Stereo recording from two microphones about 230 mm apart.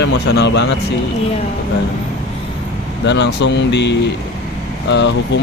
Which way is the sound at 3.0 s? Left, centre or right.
Left.